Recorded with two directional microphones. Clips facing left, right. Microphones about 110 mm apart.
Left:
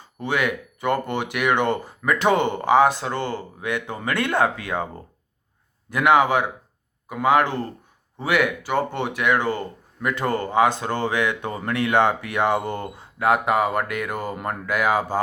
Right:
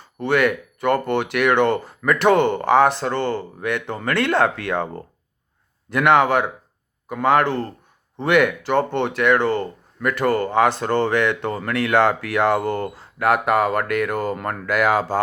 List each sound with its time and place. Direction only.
0.0 s speech: 15° left (ahead or behind)
5.9 s speech: 10° left (ahead or behind)